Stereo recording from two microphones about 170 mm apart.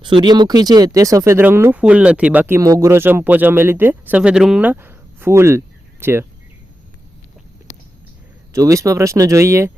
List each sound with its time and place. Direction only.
0.0 s speech: 25° right (ahead or behind)
8.5 s speech: 20° right (ahead or behind)